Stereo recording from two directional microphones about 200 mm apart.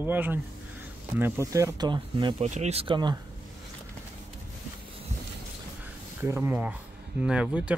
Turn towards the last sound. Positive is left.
turn(degrees=-5)  # may be behind; listen again after turning